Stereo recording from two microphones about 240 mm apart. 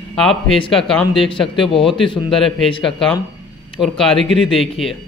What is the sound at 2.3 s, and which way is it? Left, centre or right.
Speech, centre.